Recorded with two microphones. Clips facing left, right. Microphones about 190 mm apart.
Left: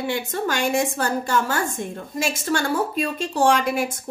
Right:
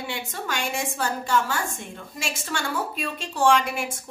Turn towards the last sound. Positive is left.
turn(degrees=40)  # may be behind; listen again after turning